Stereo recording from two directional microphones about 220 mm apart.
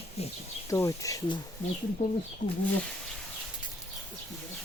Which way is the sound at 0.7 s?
15° left (ahead or behind).